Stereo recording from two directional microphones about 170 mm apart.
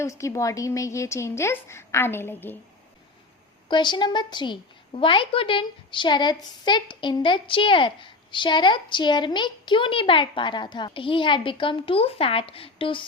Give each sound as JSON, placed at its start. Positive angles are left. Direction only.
{"t": 0.0, "sound": "a woman's voice", "side_deg": 15}
{"t": 3.7, "sound": "a woman's voice", "side_deg": 25}